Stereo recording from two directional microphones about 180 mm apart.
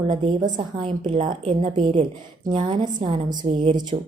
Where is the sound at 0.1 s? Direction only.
30° right (ahead or behind).